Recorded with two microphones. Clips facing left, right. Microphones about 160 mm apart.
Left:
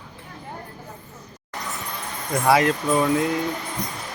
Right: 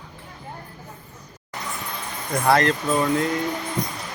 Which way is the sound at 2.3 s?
10° left (ahead or behind).